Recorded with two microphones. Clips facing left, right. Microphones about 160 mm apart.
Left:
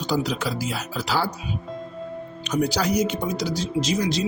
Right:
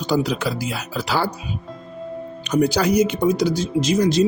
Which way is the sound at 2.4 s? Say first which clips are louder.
Right 5 dB; 55° right (ahead or behind).